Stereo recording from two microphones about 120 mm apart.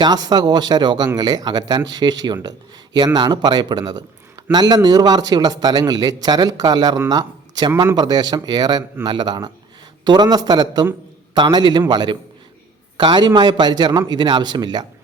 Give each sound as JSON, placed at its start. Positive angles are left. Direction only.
{"t": 0.0, "sound": "speech", "side_deg": -35}